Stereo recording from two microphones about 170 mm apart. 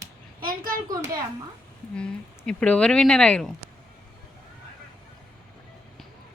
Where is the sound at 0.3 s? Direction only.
55° right (ahead or behind).